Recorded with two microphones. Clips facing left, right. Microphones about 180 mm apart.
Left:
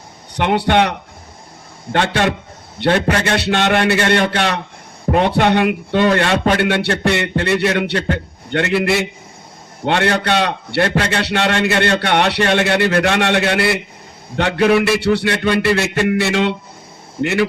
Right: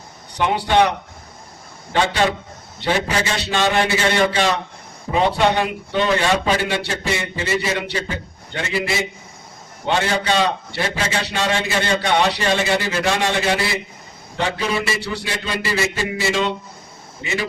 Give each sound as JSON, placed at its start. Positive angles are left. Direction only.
{"t": 0.3, "sound": "a man's voice", "side_deg": 65}